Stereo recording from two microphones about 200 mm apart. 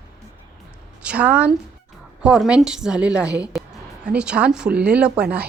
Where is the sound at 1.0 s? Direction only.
5° right (ahead or behind).